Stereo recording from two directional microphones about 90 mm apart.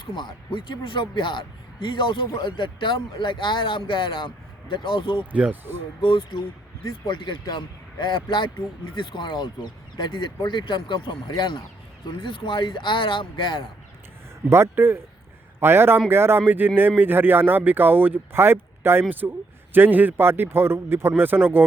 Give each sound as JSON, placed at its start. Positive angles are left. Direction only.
{"t": 0.0, "sound": "speech", "side_deg": 60}
{"t": 5.3, "sound": "speech", "side_deg": -20}
{"t": 6.0, "sound": "speech", "side_deg": 70}
{"t": 7.1, "sound": "speech", "side_deg": 60}
{"t": 14.5, "sound": "speech", "side_deg": -25}